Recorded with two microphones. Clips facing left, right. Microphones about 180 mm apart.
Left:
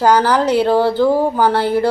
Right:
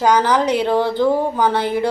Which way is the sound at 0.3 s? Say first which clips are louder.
Left 2 dB; 20° right (ahead or behind).